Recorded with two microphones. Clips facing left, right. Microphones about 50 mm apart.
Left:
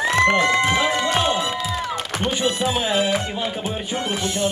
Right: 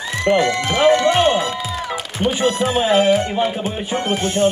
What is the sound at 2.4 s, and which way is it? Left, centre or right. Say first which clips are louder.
Music: right 4 dB; right.